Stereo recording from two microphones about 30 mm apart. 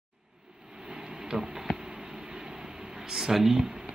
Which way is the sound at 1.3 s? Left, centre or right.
Centre.